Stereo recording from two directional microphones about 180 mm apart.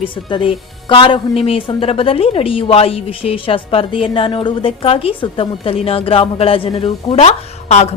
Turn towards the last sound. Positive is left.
turn(degrees=40)  # may be behind; listen again after turning